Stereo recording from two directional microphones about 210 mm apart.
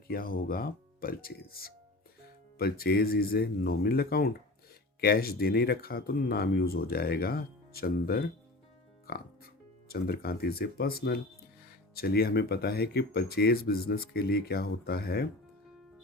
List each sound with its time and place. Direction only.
0.1 s speech: 45° left (ahead or behind)
9.0 s music: 45° left (ahead or behind)
9.9 s speech: 45° left (ahead or behind)